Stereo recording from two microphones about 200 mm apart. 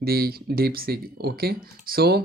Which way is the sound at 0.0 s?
50° right (ahead or behind).